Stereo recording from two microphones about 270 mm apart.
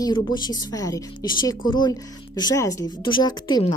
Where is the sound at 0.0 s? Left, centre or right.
Centre.